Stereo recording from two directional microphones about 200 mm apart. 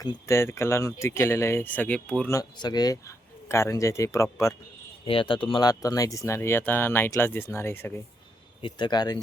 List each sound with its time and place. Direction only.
0.0 s speech: 15° left (ahead or behind)
2.3 s speech: 20° left (ahead or behind)
5.0 s speech: 25° left (ahead or behind)